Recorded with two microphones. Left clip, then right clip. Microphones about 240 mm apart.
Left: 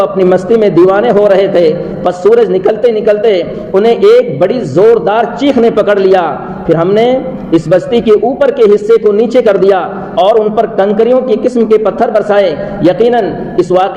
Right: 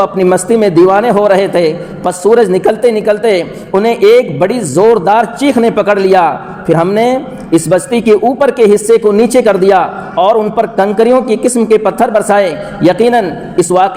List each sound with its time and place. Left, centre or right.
0.0 s a man's voice: right